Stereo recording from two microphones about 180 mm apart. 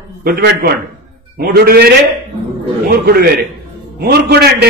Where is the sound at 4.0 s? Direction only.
60° right (ahead or behind).